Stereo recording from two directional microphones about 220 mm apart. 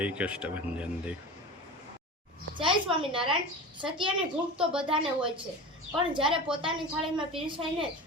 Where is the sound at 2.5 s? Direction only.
20° right (ahead or behind).